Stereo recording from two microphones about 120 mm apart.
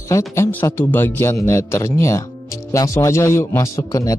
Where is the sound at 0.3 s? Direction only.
20° left (ahead or behind).